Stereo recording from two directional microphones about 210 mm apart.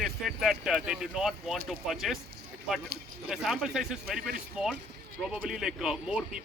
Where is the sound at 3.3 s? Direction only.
Centre (ahead or behind).